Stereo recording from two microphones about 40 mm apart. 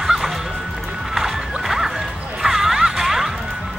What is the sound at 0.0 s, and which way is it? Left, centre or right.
Music, centre.